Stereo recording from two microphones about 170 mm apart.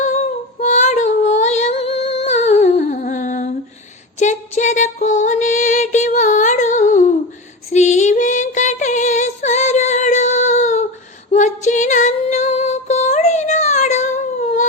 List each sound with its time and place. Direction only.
0.0 s female singing: 45° left (ahead or behind)
4.2 s music: 45° left (ahead or behind)
7.7 s a sound: 45° left (ahead or behind)
11.3 s female singing: 45° left (ahead or behind)